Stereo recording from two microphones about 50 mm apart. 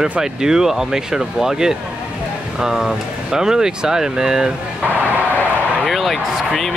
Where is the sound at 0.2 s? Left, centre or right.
Centre.